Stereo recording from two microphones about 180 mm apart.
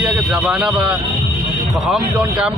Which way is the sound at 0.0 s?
Centre (ahead or behind).